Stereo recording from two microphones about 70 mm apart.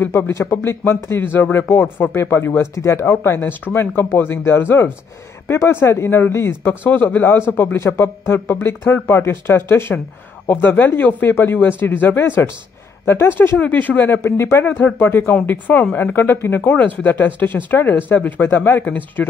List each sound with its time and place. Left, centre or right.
0.0 s speech: left
7.6 s speech: left
13.6 s speech: left
14.6 s speech: left
16.0 s speech: left